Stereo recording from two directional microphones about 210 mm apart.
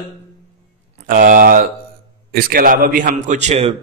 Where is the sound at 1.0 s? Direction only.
40° right (ahead or behind).